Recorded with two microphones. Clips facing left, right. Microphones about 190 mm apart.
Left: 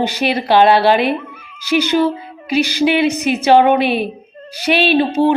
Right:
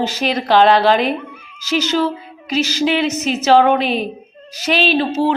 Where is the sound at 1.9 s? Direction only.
15° left (ahead or behind).